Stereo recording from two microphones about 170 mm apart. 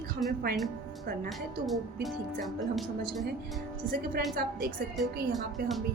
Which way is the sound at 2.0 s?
Centre (ahead or behind).